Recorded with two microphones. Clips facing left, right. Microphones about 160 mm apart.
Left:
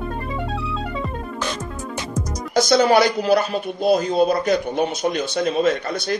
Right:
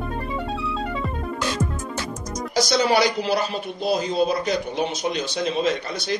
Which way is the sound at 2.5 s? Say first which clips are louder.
Left 5 dB; 50° left (ahead or behind).